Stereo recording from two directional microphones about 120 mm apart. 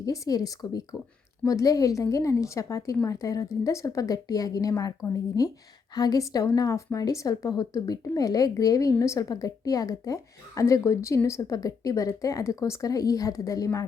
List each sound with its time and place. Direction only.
0.0 s a woman's voice: 30° left (ahead or behind)